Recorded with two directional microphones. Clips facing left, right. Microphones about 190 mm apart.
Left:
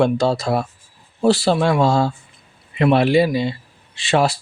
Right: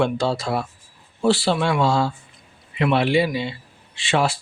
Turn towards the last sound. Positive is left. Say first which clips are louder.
# left 3 dB
turn(degrees=40)  # may be behind; listen again after turning